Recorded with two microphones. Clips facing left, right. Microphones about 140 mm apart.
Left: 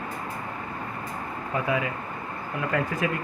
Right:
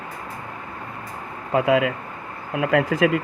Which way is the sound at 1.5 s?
85° right.